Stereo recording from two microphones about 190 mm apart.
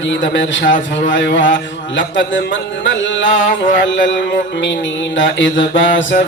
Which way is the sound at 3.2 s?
45° left (ahead or behind).